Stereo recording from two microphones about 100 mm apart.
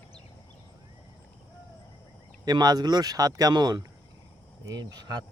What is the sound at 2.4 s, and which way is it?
Speech, 45° right (ahead or behind).